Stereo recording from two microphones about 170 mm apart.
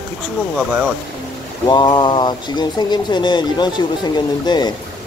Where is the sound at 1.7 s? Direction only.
30° left (ahead or behind).